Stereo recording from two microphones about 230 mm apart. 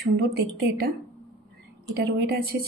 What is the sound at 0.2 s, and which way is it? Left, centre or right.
Speech, right.